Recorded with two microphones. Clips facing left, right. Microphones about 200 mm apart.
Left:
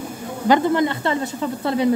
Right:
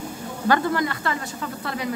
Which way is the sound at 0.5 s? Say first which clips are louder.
Left 5 dB; 20° left (ahead or behind).